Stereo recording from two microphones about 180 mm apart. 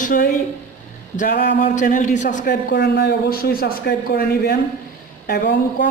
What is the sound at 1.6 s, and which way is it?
Speech, 45° left (ahead or behind).